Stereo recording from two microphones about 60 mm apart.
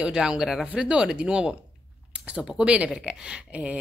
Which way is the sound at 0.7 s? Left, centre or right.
Centre.